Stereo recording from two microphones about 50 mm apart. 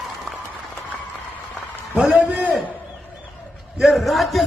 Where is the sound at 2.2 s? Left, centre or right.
Right.